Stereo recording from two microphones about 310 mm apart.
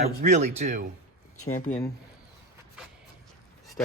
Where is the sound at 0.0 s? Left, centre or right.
Right.